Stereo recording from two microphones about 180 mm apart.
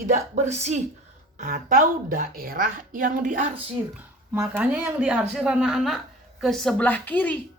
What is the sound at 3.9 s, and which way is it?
Speech, 10° right (ahead or behind).